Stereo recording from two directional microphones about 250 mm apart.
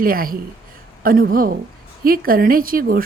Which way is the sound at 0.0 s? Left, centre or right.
Right.